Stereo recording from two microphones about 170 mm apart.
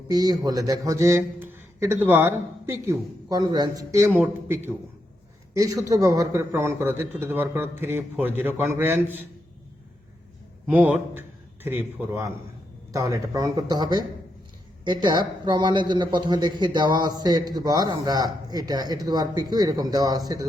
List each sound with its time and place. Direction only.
0.1 s a man's voice: 25° right (ahead or behind)
10.7 s a man's voice: 10° right (ahead or behind)